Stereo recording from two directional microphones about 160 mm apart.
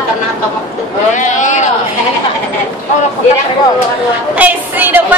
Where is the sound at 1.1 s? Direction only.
50° left (ahead or behind).